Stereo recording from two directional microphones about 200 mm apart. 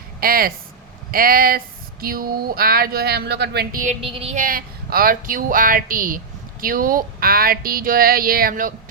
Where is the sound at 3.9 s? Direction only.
30° right (ahead or behind).